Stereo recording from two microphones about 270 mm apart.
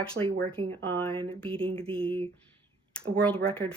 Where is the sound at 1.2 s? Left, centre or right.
Centre.